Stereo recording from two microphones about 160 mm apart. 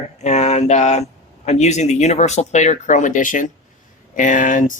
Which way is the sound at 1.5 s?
45° left (ahead or behind).